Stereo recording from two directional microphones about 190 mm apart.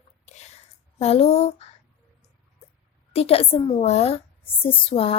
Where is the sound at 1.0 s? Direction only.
30° left (ahead or behind).